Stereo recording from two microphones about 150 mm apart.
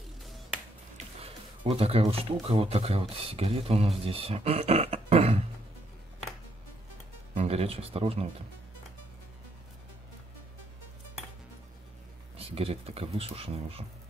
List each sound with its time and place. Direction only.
0.9 s speech: 40° right (ahead or behind)
7.3 s speech: 40° right (ahead or behind)
12.4 s speech: 40° right (ahead or behind)